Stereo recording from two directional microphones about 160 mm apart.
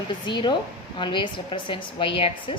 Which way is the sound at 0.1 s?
30° left (ahead or behind).